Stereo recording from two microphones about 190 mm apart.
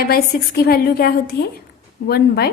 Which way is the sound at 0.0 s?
55° left (ahead or behind).